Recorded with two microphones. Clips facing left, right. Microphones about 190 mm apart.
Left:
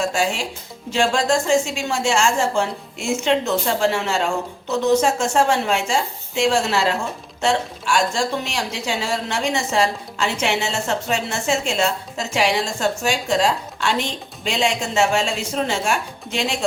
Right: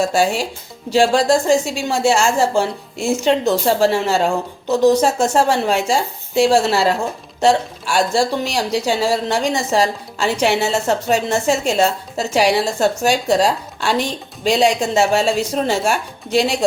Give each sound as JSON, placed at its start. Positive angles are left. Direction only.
{"t": 0.0, "sound": "a woman's voice", "side_deg": -35}